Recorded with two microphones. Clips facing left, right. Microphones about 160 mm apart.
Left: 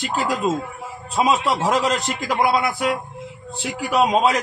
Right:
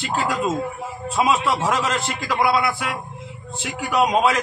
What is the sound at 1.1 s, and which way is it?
A man's voice, 35° left (ahead or behind).